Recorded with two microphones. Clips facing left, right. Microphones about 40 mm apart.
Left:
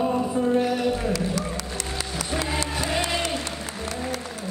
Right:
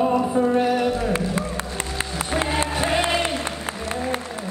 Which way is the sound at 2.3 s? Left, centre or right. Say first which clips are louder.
Right 4 dB; right.